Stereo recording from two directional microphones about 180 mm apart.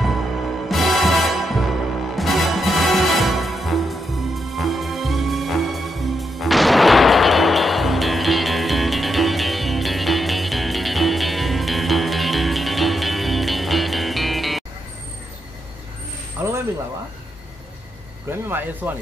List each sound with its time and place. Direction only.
0.7 s music: centre (ahead or behind)
18.5 s speech: 10° right (ahead or behind)